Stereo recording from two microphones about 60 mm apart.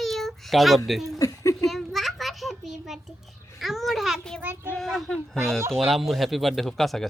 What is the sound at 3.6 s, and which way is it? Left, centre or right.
Speech, centre.